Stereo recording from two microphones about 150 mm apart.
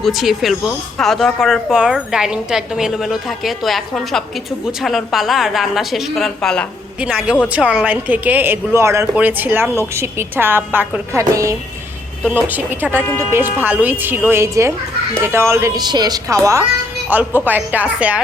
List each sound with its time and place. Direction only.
0.0 s speech: centre (ahead or behind)
7.0 s a woman's voice: 5° right (ahead or behind)